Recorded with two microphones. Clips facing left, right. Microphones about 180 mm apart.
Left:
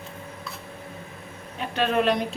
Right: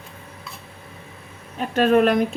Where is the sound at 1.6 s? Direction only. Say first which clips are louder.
Right 7 dB; 45° right (ahead or behind).